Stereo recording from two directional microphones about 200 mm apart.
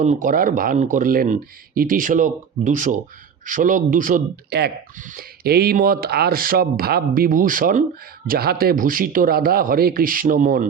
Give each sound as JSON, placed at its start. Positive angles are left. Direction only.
{"t": 0.0, "sound": "speech", "side_deg": -40}